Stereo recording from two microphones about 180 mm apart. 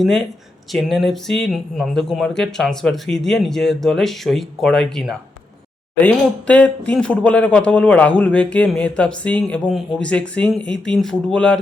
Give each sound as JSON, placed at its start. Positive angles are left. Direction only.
{"t": 0.0, "sound": "speech", "side_deg": 0}